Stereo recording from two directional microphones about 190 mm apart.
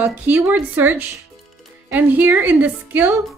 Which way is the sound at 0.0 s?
10° right (ahead or behind).